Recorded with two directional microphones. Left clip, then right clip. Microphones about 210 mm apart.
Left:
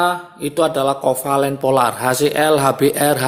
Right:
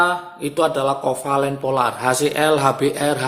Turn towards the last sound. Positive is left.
turn(degrees=25)  # may be behind; listen again after turning